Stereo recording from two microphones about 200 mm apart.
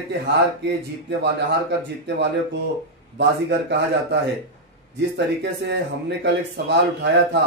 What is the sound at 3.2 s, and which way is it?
Speech, 55° right (ahead or behind).